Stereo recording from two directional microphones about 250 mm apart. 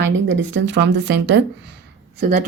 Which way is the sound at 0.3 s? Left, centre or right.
Right.